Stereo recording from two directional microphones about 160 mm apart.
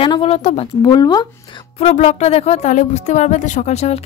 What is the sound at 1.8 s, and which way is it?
Speech, 45° left (ahead or behind).